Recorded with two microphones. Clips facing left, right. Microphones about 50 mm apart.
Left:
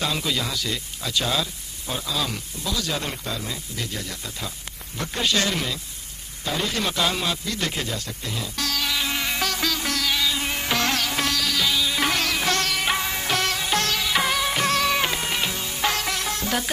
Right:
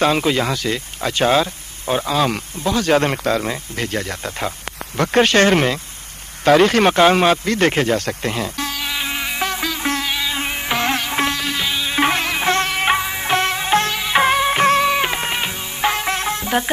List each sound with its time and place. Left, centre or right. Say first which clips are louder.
0.0 s speech: right 9 dB; right
6.4 s speech: right 14 dB; right
8.5 s music: right 2 dB; right
9.8 s insect: right 5 dB; right
10.1 s music: right 2 dB; right
13.0 s music: right 4 dB; centre
13.3 s music: right 8 dB; right
14.9 s music: right 5 dB; centre